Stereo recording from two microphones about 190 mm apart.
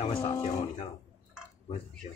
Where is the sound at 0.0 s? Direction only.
30° left (ahead or behind).